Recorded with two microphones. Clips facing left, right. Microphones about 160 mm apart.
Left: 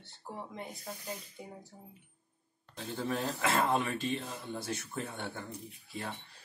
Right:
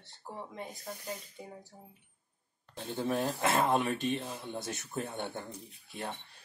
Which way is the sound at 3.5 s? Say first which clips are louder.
Right 1 dB; 20° right (ahead or behind).